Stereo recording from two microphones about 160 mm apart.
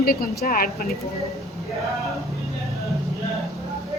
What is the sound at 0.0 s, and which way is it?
Speech, 70° left (ahead or behind).